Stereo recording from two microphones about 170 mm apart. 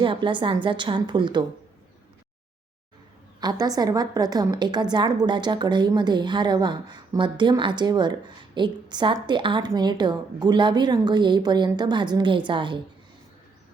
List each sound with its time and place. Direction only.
0.0 s a woman's voice: 30° right (ahead or behind)
3.4 s a woman's voice: 20° right (ahead or behind)